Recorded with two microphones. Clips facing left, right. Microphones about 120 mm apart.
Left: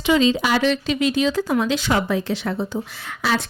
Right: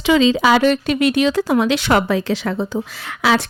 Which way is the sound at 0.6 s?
55° right (ahead or behind).